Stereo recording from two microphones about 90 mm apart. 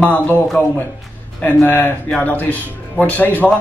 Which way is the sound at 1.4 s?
20° left (ahead or behind).